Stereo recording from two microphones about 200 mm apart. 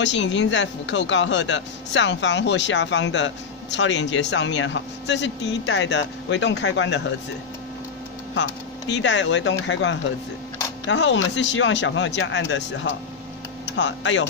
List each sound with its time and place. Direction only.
0.0 s speech: 65° left (ahead or behind)
8.4 s speech: 65° left (ahead or behind)